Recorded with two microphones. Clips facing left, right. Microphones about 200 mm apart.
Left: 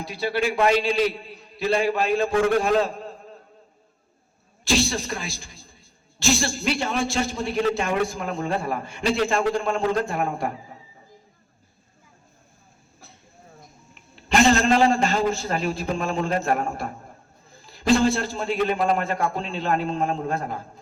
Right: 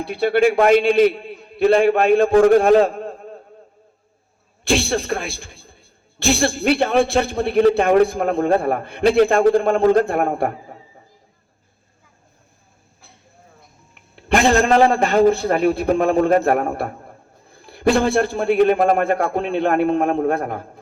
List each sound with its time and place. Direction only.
0.0 s a man's voice: 60° right (ahead or behind)
2.8 s a sound: 60° right (ahead or behind)
4.6 s a man's voice: 55° right (ahead or behind)
13.9 s a man's voice: 60° right (ahead or behind)